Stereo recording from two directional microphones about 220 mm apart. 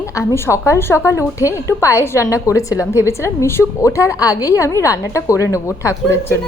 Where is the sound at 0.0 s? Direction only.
15° left (ahead or behind).